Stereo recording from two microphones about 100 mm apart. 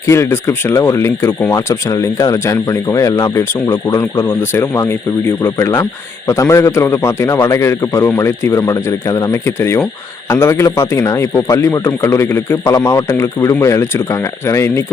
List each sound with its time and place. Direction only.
0.1 s speech: 25° left (ahead or behind)
1.5 s speech: 35° left (ahead or behind)